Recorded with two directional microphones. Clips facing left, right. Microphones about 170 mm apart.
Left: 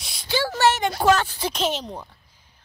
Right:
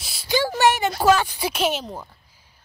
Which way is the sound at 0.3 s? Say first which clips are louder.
Right 2 dB; 15° right (ahead or behind).